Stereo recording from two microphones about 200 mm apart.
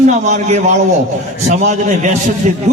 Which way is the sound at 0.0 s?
40° right (ahead or behind).